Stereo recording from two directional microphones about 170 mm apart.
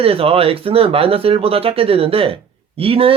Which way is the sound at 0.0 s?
35° right (ahead or behind).